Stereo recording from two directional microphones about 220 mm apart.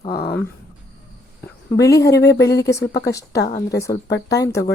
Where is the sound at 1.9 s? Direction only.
50° left (ahead or behind).